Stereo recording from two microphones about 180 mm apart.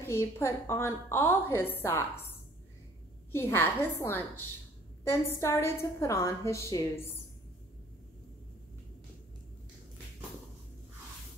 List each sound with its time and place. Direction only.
0.0 s a woman's voice: 15° left (ahead or behind)
3.3 s a woman's voice: 15° left (ahead or behind)